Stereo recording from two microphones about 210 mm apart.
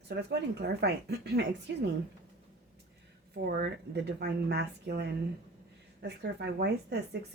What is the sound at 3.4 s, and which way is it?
Speech, 50° right (ahead or behind).